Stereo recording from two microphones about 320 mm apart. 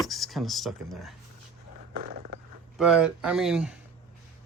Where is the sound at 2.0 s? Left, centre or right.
Right.